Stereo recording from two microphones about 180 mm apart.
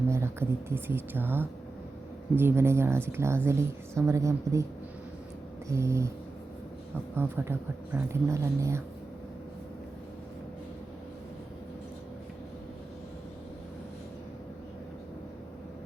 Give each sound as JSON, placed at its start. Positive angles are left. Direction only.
{"t": 0.1, "sound": "speech", "side_deg": -15}
{"t": 5.6, "sound": "speech", "side_deg": -15}
{"t": 7.2, "sound": "speech", "side_deg": -10}